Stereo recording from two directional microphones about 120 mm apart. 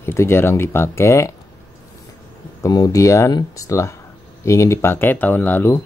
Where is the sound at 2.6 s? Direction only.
30° left (ahead or behind).